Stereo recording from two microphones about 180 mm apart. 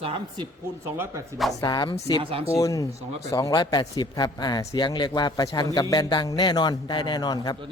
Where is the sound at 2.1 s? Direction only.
30° right (ahead or behind).